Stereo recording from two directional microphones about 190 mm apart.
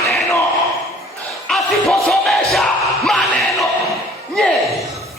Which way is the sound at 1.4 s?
Centre (ahead or behind).